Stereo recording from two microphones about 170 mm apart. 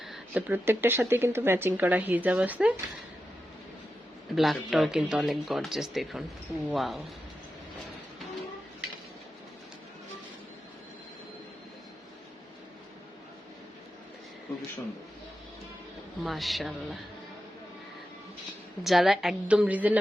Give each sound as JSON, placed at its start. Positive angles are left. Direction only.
{"t": 0.0, "sound": "speech", "side_deg": -5}
{"t": 4.4, "sound": "speech", "side_deg": 0}
{"t": 16.2, "sound": "speech", "side_deg": 0}
{"t": 18.8, "sound": "speech", "side_deg": 0}